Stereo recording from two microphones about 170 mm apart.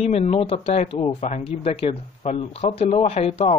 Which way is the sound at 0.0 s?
40° left (ahead or behind).